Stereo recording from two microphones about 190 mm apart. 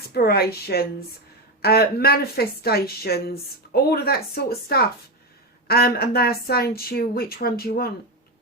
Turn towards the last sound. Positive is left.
turn(degrees=55)  # may be behind; listen again after turning